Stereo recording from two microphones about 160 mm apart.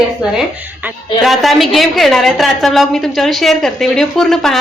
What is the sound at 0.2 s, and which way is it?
A woman's voice, 5° right (ahead or behind).